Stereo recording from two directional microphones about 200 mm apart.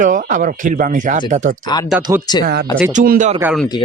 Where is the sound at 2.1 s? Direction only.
15° right (ahead or behind).